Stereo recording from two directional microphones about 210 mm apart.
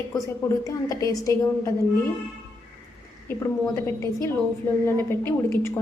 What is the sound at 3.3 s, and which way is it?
A woman's voice, 15° left (ahead or behind).